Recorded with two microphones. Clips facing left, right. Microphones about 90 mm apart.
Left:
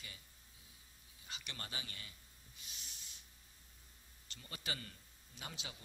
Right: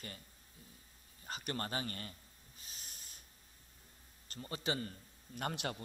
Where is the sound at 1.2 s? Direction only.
45° right (ahead or behind).